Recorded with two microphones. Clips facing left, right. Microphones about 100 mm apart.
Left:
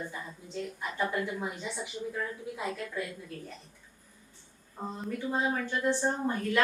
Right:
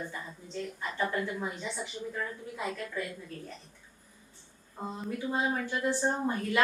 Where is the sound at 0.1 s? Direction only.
10° left (ahead or behind).